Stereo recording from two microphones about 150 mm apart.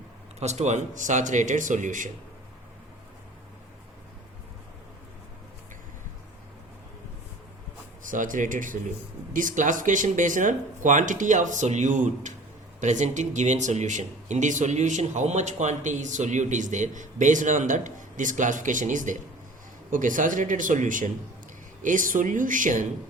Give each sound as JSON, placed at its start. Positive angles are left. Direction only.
{"t": 0.3, "sound": "speech", "side_deg": -50}
{"t": 8.0, "sound": "speech", "side_deg": -60}